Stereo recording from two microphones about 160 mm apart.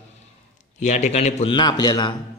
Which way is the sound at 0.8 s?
45° left (ahead or behind).